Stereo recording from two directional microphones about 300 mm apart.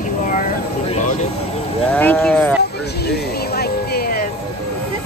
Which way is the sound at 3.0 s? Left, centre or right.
Left.